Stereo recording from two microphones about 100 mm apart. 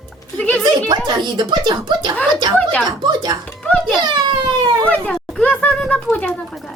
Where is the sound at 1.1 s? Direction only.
50° right (ahead or behind).